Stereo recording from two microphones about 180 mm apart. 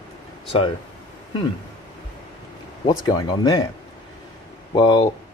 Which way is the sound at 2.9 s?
20° left (ahead or behind).